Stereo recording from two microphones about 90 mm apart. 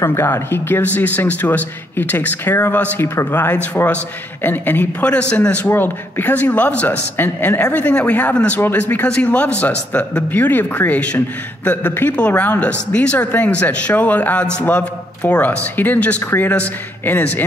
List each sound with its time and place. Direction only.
0.0 s speech: 30° left (ahead or behind)